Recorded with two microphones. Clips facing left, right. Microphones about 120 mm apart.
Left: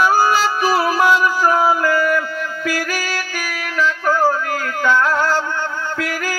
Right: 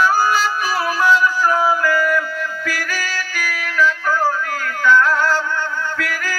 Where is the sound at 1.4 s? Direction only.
30° left (ahead or behind).